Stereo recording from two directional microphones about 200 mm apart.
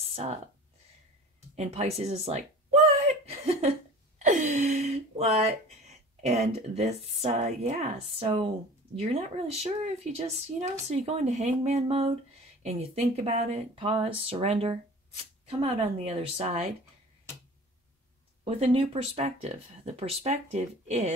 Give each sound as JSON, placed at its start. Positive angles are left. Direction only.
{"t": 0.0, "sound": "a sound", "side_deg": -30}
{"t": 1.5, "sound": "speech", "side_deg": -35}
{"t": 3.0, "sound": "chuckle", "side_deg": -30}
{"t": 4.2, "sound": "a sound", "side_deg": -40}
{"t": 6.7, "sound": "speech", "side_deg": -30}
{"t": 18.4, "sound": "speech", "side_deg": -30}